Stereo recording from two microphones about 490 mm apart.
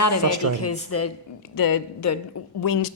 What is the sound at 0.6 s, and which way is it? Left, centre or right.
A woman's voice, left.